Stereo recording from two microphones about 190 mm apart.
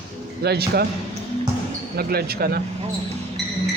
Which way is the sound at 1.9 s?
55° right (ahead or behind).